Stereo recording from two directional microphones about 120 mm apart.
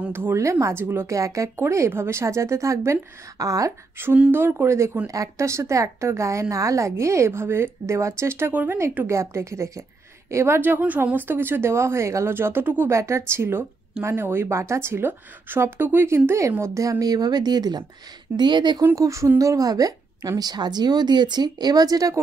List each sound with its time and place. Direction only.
0.0 s speech: 20° right (ahead or behind)
4.1 s a woman's voice: 15° right (ahead or behind); by 18.9 s 40° right (ahead or behind)
18.9 s a woman's voice: 25° right (ahead or behind)